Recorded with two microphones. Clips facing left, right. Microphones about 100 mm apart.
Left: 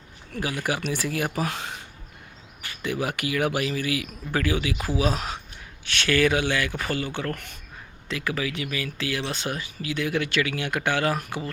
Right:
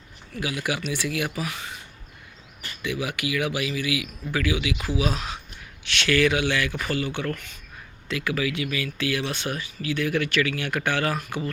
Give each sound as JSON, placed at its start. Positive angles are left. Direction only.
{"t": 0.6, "sound": "speech", "side_deg": 40}
{"t": 2.8, "sound": "speech", "side_deg": 40}